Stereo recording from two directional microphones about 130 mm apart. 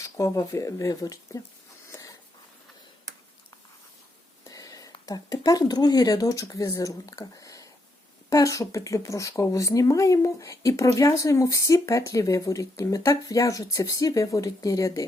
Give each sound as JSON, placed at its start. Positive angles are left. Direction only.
{"t": 0.0, "sound": "speech", "side_deg": 25}
{"t": 1.9, "sound": "a sound", "side_deg": 25}
{"t": 4.4, "sound": "speech", "side_deg": 25}